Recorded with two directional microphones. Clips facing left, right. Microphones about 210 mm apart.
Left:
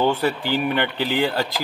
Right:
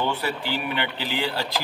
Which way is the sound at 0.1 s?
45° left (ahead or behind).